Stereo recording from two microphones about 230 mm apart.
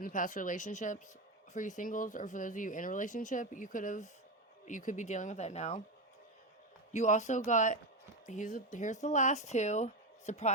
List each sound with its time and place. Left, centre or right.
0.0 s speech: left
6.9 s speech: left